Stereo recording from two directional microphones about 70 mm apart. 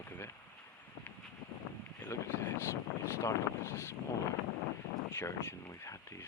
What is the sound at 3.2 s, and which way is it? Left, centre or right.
Speech, left.